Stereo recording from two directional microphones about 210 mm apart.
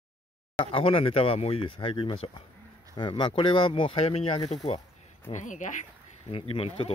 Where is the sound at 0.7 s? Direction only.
25° left (ahead or behind).